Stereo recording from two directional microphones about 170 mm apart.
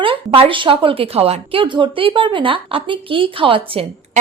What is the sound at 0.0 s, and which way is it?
A woman's voice, 30° right (ahead or behind).